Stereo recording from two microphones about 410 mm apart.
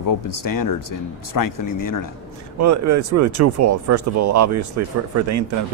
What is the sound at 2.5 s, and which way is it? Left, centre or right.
Speech, right.